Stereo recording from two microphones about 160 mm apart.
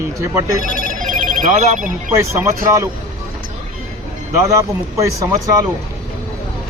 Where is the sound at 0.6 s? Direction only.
55° right (ahead or behind).